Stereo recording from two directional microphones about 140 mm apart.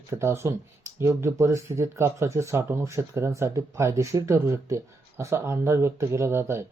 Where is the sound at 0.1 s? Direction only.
20° right (ahead or behind).